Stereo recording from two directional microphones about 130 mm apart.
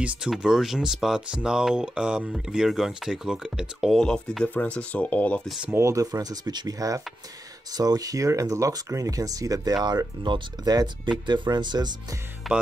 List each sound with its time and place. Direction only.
0.0 s speech: 5° right (ahead or behind); by 5.5 s 10° left (ahead or behind)
5.7 s speech: 20° right (ahead or behind)
12.4 s speech: centre (ahead or behind)